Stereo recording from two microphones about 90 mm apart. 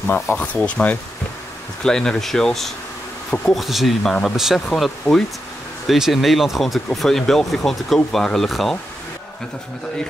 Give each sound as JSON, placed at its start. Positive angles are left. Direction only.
{"t": 0.1, "sound": "speech", "side_deg": 20}